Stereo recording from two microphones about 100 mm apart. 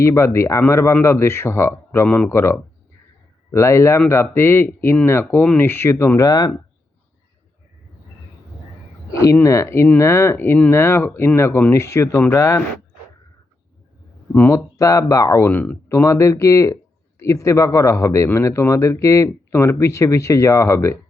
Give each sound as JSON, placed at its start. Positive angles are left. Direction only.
{"t": 0.0, "sound": "speech", "side_deg": 30}
{"t": 9.2, "sound": "speech", "side_deg": 30}
{"t": 14.5, "sound": "speech", "side_deg": 35}
{"t": 15.4, "sound": "speech", "side_deg": 15}
{"t": 15.9, "sound": "speech", "side_deg": 30}